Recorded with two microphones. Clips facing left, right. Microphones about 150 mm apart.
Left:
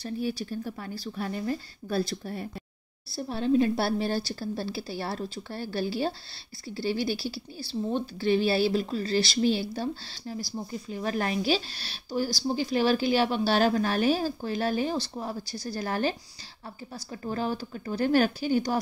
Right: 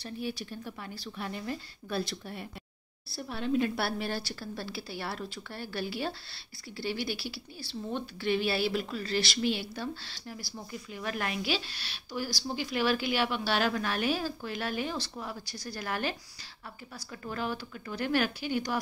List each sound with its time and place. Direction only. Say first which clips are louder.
0.0 s a woman's voice: left 6 dB; 35° left (ahead or behind)